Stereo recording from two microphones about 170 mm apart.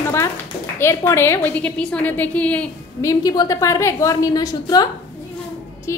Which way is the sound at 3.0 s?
20° left (ahead or behind).